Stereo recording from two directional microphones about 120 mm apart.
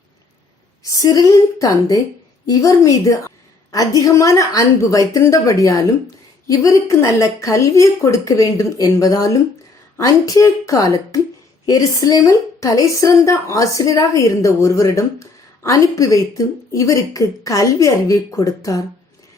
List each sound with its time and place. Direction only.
0.9 s a woman's voice: 30° left (ahead or behind)